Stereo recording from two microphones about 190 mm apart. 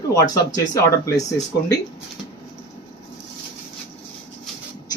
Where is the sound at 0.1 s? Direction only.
20° left (ahead or behind).